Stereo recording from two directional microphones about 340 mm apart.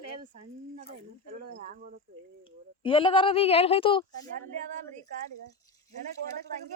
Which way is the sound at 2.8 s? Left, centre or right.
Centre.